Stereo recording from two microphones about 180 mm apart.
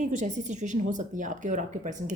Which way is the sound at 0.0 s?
40° right (ahead or behind).